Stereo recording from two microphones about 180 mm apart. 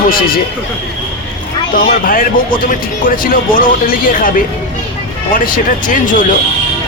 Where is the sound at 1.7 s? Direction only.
50° left (ahead or behind).